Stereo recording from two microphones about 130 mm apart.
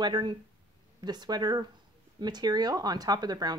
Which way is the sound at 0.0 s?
35° right (ahead or behind).